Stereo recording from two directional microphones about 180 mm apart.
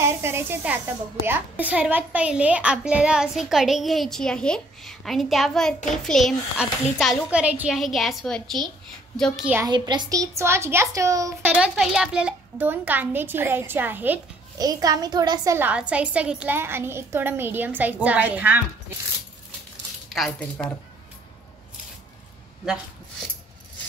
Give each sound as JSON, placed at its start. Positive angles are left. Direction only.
{"t": 0.0, "sound": "a woman's voice", "side_deg": -15}
{"t": 9.7, "sound": "a woman's voice", "side_deg": -25}
{"t": 11.5, "sound": "a woman's voice", "side_deg": -5}
{"t": 14.6, "sound": "a woman's voice", "side_deg": -20}
{"t": 20.1, "sound": "speech", "side_deg": 0}